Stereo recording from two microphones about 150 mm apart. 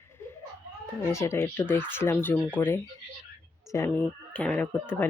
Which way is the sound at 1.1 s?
15° left (ahead or behind).